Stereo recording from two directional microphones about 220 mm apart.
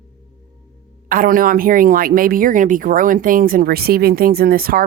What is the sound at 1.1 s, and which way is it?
Speech, 40° right (ahead or behind).